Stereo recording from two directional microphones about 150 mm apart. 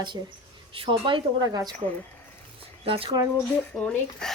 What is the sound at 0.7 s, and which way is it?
A woman's voice, 35° right (ahead or behind).